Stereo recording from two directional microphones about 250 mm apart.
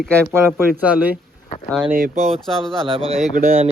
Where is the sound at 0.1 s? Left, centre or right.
Centre.